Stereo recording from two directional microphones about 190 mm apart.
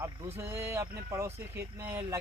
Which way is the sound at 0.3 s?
15° right (ahead or behind).